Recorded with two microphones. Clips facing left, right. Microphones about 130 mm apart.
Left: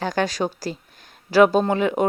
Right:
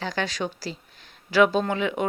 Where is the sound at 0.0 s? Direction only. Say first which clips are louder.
Left 6 dB; 45° left (ahead or behind).